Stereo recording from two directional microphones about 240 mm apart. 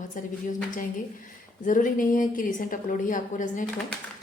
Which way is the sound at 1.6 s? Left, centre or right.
Left.